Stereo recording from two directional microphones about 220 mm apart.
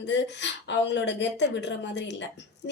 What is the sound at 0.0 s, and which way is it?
A woman's voice, 55° left (ahead or behind).